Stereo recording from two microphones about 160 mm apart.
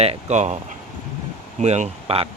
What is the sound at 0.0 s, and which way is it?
Speech, 45° right (ahead or behind).